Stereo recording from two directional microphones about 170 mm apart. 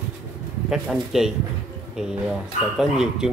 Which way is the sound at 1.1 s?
5° right (ahead or behind).